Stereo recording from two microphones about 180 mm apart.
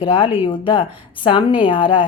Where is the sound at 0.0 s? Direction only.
25° left (ahead or behind).